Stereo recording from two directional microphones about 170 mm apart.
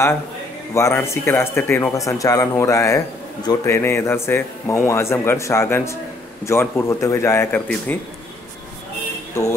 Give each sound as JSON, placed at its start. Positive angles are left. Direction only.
{"t": 0.7, "sound": "a man's voice", "side_deg": 15}